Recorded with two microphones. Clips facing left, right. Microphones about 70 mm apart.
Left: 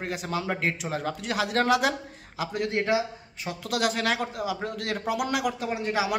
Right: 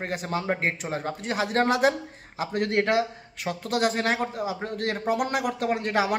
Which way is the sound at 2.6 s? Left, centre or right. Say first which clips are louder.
Right 3 dB; right.